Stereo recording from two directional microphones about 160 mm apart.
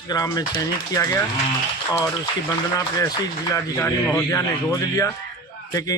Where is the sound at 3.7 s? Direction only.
15° left (ahead or behind).